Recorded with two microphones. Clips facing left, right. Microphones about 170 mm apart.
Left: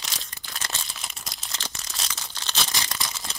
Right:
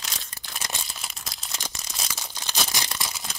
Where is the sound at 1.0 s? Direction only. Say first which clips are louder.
Even; centre (ahead or behind).